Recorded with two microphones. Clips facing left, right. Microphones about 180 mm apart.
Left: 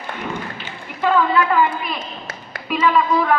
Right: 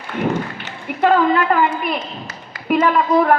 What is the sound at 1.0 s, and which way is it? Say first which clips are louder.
A woman's voice: right 3 dB; 45° right (ahead or behind).